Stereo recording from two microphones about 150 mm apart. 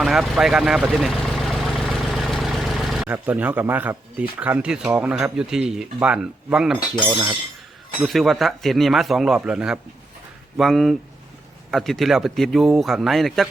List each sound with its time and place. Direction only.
0.0 s speech: 5° right (ahead or behind)